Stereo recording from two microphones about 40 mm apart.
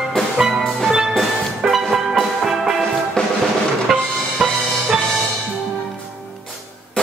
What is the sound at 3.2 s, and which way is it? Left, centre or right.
Drum, left.